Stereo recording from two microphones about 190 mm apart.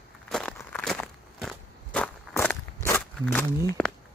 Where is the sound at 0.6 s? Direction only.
5° left (ahead or behind).